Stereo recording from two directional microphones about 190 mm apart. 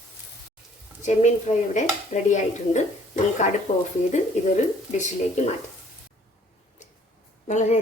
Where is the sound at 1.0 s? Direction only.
40° left (ahead or behind).